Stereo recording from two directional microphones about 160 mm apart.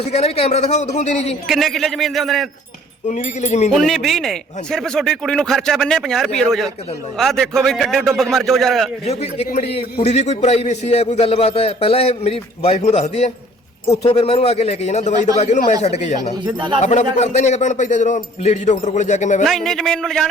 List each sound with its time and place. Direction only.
0.0 s a man's voice: 40° left (ahead or behind)
1.5 s speech: centre (ahead or behind)
3.1 s a man's voice: 45° left (ahead or behind)
3.7 s speech: centre (ahead or behind)
9.0 s a man's voice: 40° left (ahead or behind)
16.3 s speech: 30° right (ahead or behind)
16.8 s a man's voice: 45° left (ahead or behind)
19.5 s speech: centre (ahead or behind)